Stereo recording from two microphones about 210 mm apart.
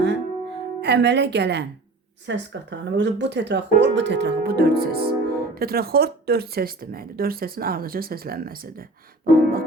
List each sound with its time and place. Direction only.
0.8 s a woman's voice: 55° right (ahead or behind)
9.2 s music: 45° right (ahead or behind)